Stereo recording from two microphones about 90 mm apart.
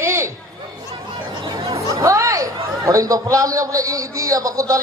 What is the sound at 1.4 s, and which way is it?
Chatter, 85° right.